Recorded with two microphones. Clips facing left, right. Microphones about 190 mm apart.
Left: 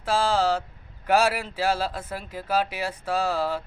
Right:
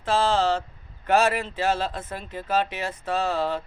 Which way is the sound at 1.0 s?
10° left (ahead or behind).